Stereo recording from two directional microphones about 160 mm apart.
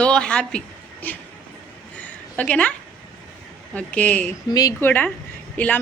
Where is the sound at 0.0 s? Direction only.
5° left (ahead or behind).